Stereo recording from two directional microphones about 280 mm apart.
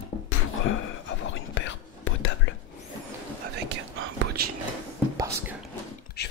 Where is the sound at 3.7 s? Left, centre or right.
Right.